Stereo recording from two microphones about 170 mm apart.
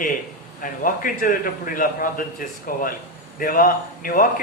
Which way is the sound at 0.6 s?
55° left (ahead or behind).